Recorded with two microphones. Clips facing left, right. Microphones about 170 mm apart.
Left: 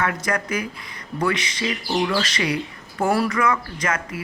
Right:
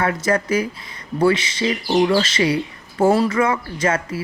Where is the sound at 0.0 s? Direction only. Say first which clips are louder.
Right 5 dB; 30° right (ahead or behind).